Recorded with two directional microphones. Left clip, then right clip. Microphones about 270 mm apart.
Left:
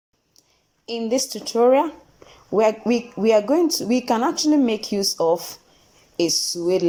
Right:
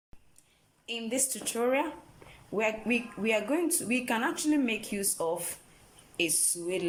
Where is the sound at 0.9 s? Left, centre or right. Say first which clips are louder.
Left 10 dB; left.